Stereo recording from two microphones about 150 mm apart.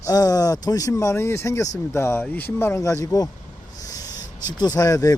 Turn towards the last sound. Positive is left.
turn(degrees=25)  # may be behind; listen again after turning